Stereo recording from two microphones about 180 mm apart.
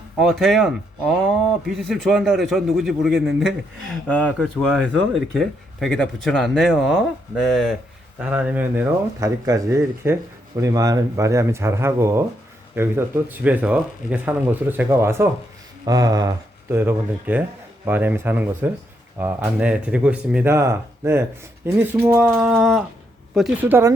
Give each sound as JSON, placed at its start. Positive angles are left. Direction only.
{"t": 0.2, "sound": "speech", "side_deg": 0}